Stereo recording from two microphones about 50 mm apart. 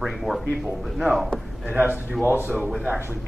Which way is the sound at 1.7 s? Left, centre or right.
Right.